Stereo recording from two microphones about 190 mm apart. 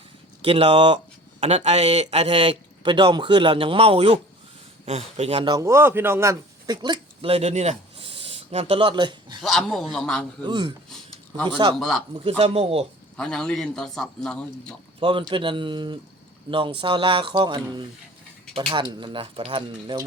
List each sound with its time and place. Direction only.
0.4 s a man's voice: 30° right (ahead or behind)
9.4 s a man's voice: centre (ahead or behind)
10.4 s speech: 20° right (ahead or behind)
10.8 s a sound: centre (ahead or behind)
11.7 s a man's voice: centre (ahead or behind)
12.4 s speech: 30° right (ahead or behind)
13.1 s a man's voice: 5° left (ahead or behind)
15.3 s speech: 25° right (ahead or behind)